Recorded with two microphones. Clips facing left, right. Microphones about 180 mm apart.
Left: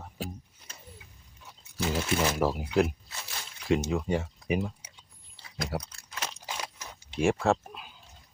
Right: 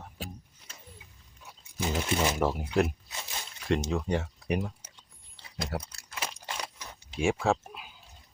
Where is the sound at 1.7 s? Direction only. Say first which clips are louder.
Left 1 dB; 15° right (ahead or behind).